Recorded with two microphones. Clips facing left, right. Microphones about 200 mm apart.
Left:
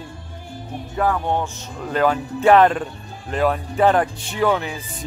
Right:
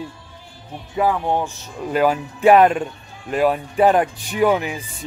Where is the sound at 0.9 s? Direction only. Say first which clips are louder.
Right 2 dB; 10° right (ahead or behind).